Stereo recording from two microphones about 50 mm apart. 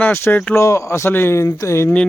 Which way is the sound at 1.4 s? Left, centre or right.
Left.